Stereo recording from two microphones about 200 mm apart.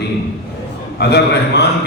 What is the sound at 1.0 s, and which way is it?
Speech, 55° left (ahead or behind).